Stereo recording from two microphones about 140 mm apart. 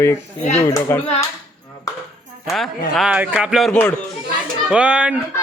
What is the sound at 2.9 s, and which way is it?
A man's voice, 5° right (ahead or behind).